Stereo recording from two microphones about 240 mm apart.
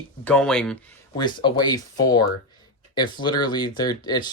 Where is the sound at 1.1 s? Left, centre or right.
Centre.